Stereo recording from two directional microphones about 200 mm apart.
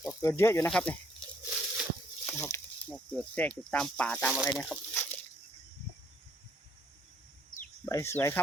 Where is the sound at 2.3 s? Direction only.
10° left (ahead or behind).